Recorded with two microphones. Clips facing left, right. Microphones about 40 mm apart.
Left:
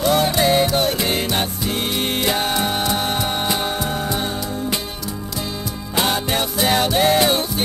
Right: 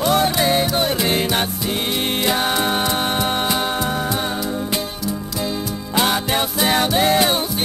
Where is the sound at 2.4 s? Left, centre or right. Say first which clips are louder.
Right 1 dB; centre.